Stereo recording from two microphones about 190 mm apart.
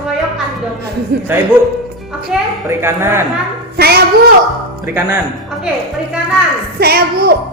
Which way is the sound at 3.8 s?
55° right (ahead or behind).